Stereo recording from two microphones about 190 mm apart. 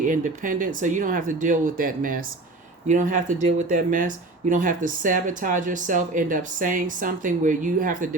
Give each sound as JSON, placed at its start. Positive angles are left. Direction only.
{"t": 0.0, "sound": "speech", "side_deg": -45}